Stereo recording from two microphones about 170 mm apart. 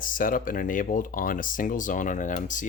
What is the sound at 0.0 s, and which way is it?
Speech, 55° left (ahead or behind).